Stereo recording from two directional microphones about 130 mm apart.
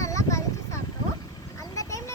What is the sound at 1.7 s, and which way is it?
Vehicle, 25° left (ahead or behind).